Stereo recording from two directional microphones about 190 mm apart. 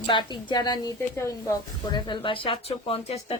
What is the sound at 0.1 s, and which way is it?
A woman's voice, 25° left (ahead or behind).